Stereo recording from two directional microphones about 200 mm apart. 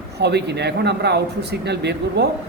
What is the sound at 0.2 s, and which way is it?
Speech, 55° right (ahead or behind).